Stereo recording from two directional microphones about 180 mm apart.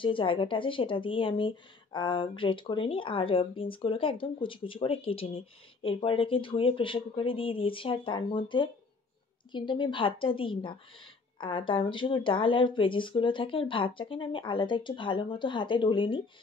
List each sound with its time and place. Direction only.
0.0 s a woman's voice: 30° left (ahead or behind)